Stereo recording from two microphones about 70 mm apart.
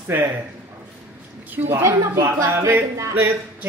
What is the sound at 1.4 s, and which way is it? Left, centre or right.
Speech, right.